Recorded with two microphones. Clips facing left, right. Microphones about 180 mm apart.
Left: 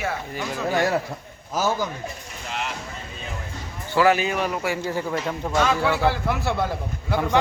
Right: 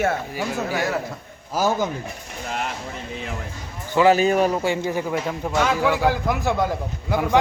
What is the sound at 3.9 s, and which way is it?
Speech, 25° right (ahead or behind).